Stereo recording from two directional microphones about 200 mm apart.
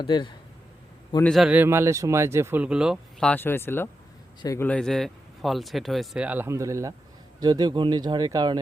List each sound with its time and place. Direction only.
0.0 s speech: 25° left (ahead or behind)
1.3 s speech: 5° right (ahead or behind); by 8.5 s 20° right (ahead or behind)